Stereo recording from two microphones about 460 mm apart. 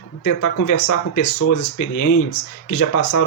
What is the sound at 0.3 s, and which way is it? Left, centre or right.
Speech, left.